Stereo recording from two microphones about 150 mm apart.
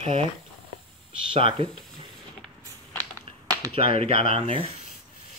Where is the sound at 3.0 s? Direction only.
20° right (ahead or behind).